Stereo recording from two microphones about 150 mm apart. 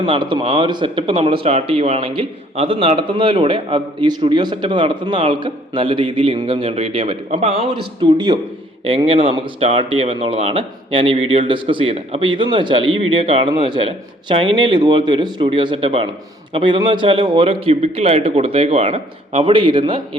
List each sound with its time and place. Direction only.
0.0 s speech: 35° right (ahead or behind)
9.0 s speech: 40° right (ahead or behind)